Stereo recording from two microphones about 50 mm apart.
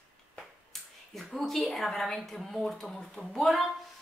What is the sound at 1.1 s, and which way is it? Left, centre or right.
A woman's voice, centre.